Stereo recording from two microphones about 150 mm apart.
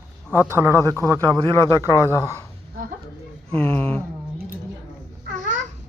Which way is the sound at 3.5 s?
10° left (ahead or behind).